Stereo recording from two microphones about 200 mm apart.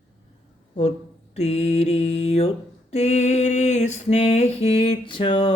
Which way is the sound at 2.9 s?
30° left (ahead or behind).